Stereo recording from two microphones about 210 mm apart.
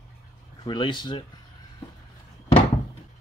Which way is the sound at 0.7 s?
25° left (ahead or behind).